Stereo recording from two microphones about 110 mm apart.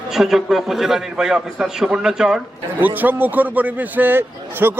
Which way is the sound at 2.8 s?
15° right (ahead or behind).